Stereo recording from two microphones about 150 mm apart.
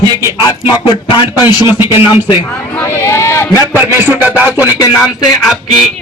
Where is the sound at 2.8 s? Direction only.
15° left (ahead or behind).